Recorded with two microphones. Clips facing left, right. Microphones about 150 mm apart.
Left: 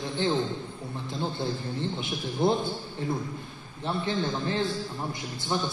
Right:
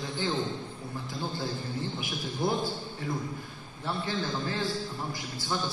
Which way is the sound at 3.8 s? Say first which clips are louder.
Left 4 dB; 25° left (ahead or behind).